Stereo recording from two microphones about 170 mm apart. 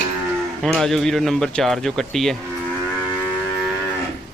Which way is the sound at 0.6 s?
Centre (ahead or behind).